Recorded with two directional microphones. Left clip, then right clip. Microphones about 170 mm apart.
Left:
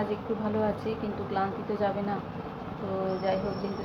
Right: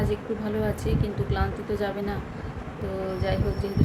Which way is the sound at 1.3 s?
20° right (ahead or behind).